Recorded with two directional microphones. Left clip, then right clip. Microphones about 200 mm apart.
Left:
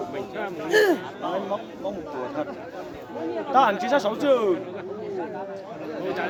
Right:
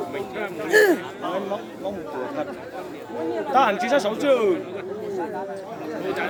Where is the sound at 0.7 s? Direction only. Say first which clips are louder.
Right 3 dB; 10° left (ahead or behind).